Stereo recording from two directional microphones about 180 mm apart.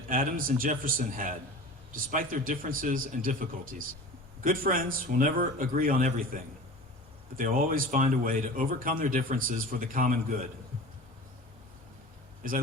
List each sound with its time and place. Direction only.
0.1 s speech: 50° right (ahead or behind)